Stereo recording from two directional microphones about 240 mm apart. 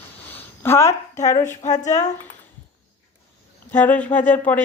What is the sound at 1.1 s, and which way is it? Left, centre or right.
Speech, left.